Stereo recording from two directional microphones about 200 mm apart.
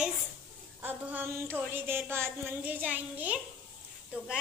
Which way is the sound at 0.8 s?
10° right (ahead or behind).